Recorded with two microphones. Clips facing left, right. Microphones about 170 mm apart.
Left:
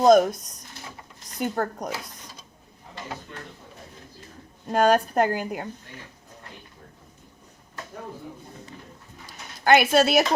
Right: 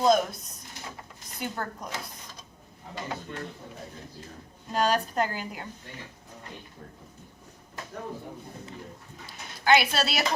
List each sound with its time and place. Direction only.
0.0 s a woman's voice: 45° left (ahead or behind)
4.7 s a woman's voice: 55° left (ahead or behind)
9.6 s a woman's voice: 50° left (ahead or behind)